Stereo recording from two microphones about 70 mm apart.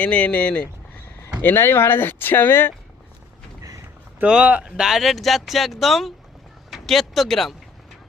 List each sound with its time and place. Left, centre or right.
0.0 s speech: centre
1.4 s speech: left
4.3 s speech: centre